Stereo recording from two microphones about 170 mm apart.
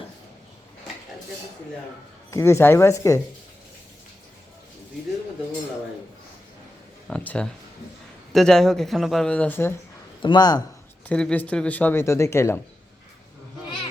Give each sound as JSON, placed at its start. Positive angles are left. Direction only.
{"t": 2.3, "sound": "speech", "side_deg": 15}
{"t": 7.1, "sound": "speech", "side_deg": 5}
{"t": 10.2, "sound": "speech", "side_deg": 25}
{"t": 11.1, "sound": "speech", "side_deg": 5}